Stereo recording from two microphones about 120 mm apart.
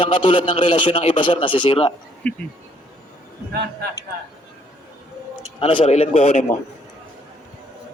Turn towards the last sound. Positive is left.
turn(degrees=60)  # may be behind; listen again after turning